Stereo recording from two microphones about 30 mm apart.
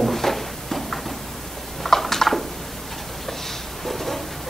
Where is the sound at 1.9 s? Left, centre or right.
Centre.